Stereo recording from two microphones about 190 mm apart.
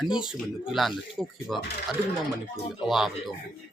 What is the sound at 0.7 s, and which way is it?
Speech, centre (ahead or behind).